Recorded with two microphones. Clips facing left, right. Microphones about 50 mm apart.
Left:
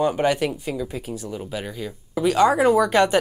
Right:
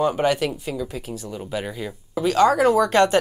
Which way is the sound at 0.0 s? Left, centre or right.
Centre.